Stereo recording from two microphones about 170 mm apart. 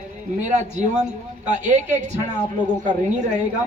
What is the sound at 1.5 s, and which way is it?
Speech, 45° right (ahead or behind).